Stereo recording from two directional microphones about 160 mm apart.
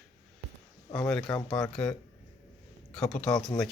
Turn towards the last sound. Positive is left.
turn(degrees=5)  # may be behind; listen again after turning